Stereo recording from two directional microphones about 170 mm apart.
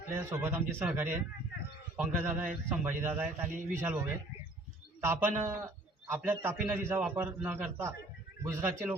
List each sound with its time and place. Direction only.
0.1 s a man's voice: 15° right (ahead or behind)